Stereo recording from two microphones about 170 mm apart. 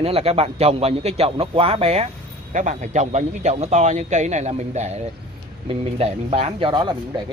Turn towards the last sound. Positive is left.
turn(degrees=-25)  # may be behind; listen again after turning